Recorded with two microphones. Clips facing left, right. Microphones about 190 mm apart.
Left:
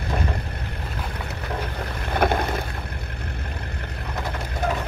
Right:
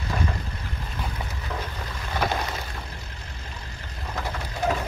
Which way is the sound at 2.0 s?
60° left (ahead or behind).